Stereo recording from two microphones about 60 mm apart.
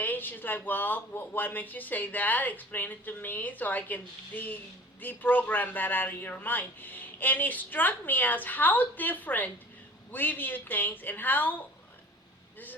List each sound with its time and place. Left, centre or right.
0.0 s speech: left